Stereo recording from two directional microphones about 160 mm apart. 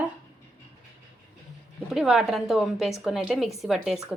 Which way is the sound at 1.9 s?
Centre (ahead or behind).